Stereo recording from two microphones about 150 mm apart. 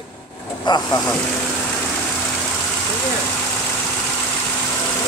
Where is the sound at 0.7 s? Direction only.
30° left (ahead or behind).